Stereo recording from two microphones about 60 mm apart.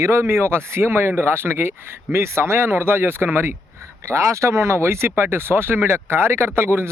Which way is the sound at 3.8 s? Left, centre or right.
Right.